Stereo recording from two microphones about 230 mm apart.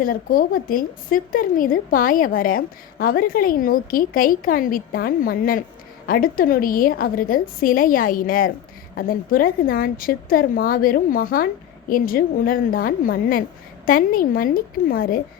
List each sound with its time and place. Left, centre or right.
0.0 s speech: left